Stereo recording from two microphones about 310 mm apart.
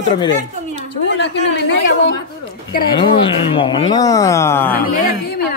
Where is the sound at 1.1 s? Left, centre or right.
Left.